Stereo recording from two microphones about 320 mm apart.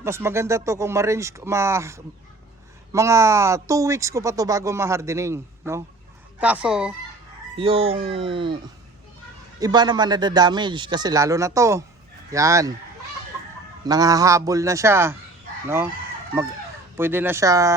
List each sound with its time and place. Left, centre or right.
0.0 s speech: centre
7.5 s speech: centre
9.6 s speech: centre
13.8 s speech: centre
17.0 s speech: centre